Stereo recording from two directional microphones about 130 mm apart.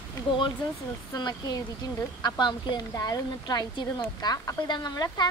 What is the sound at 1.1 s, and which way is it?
A woman's voice, 30° left (ahead or behind).